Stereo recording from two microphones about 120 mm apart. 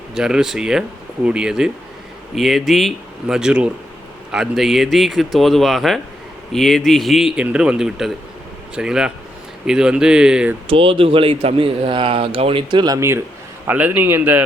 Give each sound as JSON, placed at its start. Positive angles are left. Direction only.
{"t": 0.1, "sound": "speech", "side_deg": -5}
{"t": 10.7, "sound": "speech", "side_deg": -50}
{"t": 13.0, "sound": "a man's voice", "side_deg": -25}